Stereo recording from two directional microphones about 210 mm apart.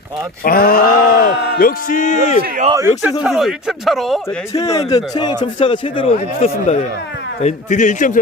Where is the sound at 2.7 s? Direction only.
15° right (ahead or behind).